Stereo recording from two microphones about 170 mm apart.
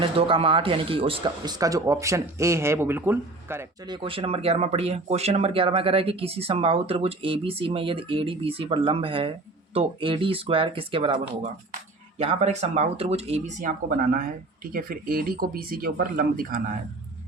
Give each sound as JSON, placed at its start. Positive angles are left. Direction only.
{"t": 0.0, "sound": "speech", "side_deg": -30}
{"t": 3.8, "sound": "speech", "side_deg": -30}